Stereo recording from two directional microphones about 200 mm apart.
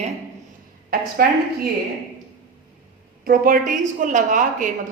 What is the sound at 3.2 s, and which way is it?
A woman's voice, 45° right (ahead or behind).